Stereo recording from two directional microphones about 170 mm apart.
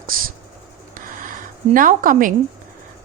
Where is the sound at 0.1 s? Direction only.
55° right (ahead or behind).